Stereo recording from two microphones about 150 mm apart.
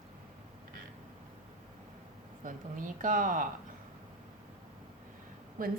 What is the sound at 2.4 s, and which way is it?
Speech, 60° right (ahead or behind).